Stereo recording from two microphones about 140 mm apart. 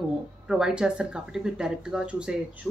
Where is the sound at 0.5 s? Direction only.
5° right (ahead or behind).